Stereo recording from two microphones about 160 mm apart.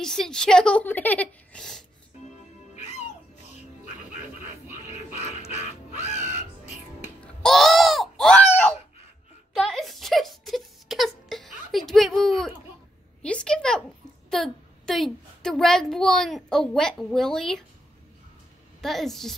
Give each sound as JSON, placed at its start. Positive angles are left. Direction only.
{"t": 0.0, "sound": "speech", "side_deg": 5}
{"t": 2.7, "sound": "music", "side_deg": 45}
{"t": 4.9, "sound": "music", "side_deg": 45}
{"t": 7.2, "sound": "music", "side_deg": 0}
{"t": 9.6, "sound": "a sound", "side_deg": 0}
{"t": 14.3, "sound": "a child's voice", "side_deg": 0}
{"t": 18.8, "sound": "a woman's voice", "side_deg": 0}